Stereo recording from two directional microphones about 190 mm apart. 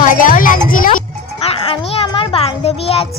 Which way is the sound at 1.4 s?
30° left (ahead or behind).